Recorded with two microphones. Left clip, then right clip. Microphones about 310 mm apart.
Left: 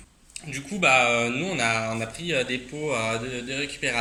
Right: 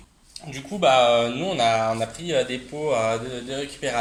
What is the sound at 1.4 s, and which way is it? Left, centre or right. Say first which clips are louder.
Speech: right 4 dB; centre.